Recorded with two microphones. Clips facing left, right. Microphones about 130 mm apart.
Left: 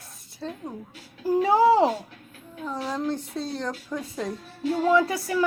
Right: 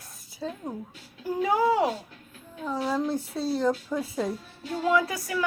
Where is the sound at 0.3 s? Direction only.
Centre (ahead or behind).